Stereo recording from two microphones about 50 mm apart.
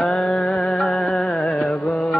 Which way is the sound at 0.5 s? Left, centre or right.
Centre.